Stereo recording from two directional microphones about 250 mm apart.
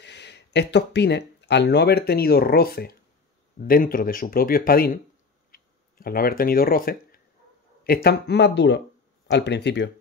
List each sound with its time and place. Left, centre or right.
0.0 s speech: left